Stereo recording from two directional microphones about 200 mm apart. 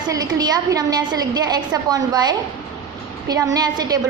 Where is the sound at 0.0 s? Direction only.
20° right (ahead or behind).